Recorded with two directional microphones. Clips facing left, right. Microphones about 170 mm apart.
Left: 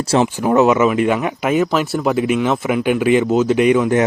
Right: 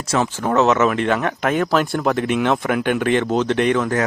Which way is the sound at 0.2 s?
15° left (ahead or behind).